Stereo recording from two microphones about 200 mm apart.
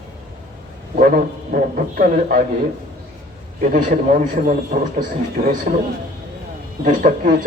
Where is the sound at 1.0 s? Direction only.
45° right (ahead or behind).